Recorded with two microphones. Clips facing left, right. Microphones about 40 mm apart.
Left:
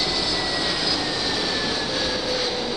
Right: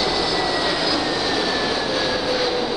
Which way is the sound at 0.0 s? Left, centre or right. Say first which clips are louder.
Right 4 dB; centre.